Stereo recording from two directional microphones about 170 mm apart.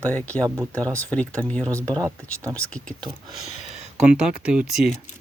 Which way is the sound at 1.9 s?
20° right (ahead or behind).